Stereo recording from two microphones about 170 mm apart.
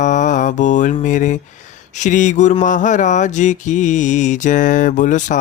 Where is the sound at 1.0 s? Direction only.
45° left (ahead or behind).